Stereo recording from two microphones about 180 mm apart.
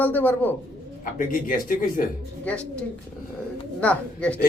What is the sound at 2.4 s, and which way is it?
Speech, 5° left (ahead or behind).